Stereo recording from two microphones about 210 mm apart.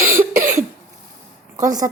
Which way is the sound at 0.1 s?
40° right (ahead or behind).